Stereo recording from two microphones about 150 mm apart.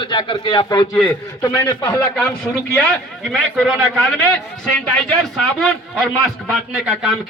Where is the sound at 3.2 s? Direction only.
Centre (ahead or behind).